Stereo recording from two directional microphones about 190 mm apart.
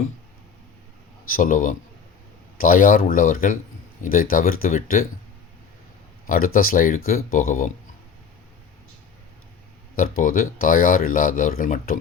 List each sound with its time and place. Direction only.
1.3 s speech: 45° left (ahead or behind)
6.2 s speech: 50° left (ahead or behind)
9.9 s speech: 45° left (ahead or behind)